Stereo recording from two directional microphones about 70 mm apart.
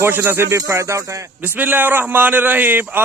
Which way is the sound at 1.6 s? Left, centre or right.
Right.